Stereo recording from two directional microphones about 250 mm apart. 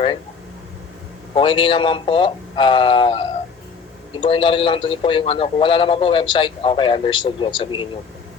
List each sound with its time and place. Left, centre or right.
1.3 s a man's voice: left